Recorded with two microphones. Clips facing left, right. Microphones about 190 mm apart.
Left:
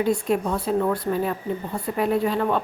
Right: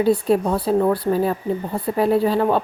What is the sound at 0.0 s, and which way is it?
Speech, 35° right (ahead or behind).